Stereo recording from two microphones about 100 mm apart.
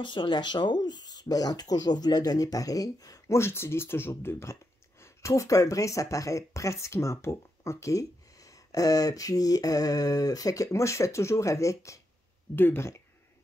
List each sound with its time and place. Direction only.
0.0 s speech: 55° left (ahead or behind); by 12.9 s 20° left (ahead or behind)